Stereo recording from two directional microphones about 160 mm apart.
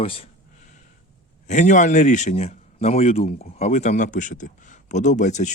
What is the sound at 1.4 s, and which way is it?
A man's voice, 50° left (ahead or behind).